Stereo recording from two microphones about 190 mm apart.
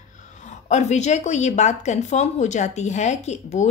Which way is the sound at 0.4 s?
40° left (ahead or behind).